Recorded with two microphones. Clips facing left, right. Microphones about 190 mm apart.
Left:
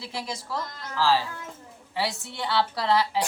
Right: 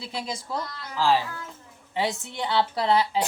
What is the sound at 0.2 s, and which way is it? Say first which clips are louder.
Speech: right 1 dB; 15° right (ahead or behind).